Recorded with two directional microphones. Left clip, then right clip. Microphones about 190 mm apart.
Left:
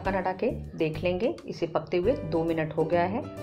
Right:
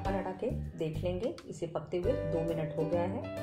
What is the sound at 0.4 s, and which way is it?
Speech, 20° left (ahead or behind).